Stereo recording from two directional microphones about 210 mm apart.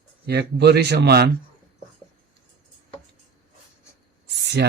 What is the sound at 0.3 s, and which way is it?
Speech, 50° right (ahead or behind).